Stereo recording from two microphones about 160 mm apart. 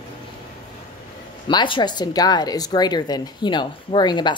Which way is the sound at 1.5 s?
30° left (ahead or behind).